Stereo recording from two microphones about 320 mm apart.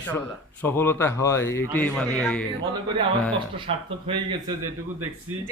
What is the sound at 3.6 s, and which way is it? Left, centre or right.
Speech, centre.